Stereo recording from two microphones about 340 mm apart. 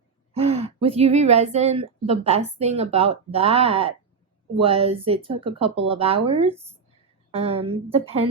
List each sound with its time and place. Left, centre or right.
0.3 s speech: centre